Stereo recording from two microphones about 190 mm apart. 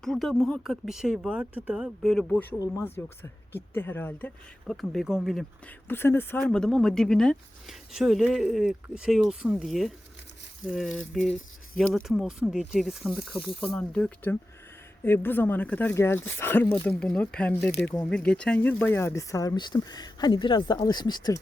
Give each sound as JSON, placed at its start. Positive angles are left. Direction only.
{"t": 0.0, "sound": "speech", "side_deg": 0}
{"t": 5.9, "sound": "speech", "side_deg": 10}